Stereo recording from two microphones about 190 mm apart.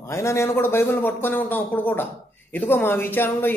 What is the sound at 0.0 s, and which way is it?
A man's voice, 15° left (ahead or behind).